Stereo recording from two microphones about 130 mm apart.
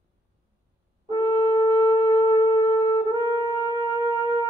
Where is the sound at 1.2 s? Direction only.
30° left (ahead or behind).